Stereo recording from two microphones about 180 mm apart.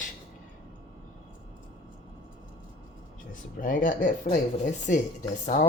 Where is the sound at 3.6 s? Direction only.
50° left (ahead or behind).